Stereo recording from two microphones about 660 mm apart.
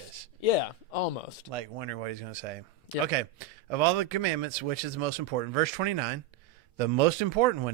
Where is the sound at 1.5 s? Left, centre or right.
Right.